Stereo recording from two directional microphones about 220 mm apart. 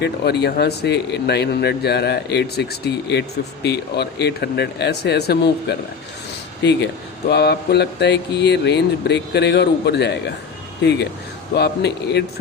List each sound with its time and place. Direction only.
0.0 s speech: 50° left (ahead or behind)